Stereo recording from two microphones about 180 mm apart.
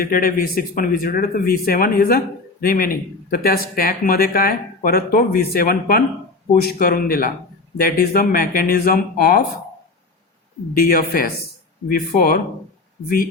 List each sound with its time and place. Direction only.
0.0 s speech: 50° left (ahead or behind)
10.8 s speech: 55° left (ahead or behind)